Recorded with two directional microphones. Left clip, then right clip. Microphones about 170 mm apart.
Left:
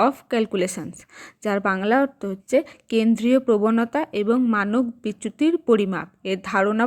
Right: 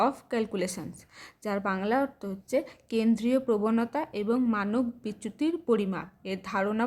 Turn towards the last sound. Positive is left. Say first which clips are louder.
# left 8 dB
turn(degrees=30)  # may be behind; listen again after turning